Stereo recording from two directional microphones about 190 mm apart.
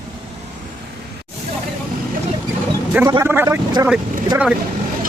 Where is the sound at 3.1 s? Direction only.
15° right (ahead or behind).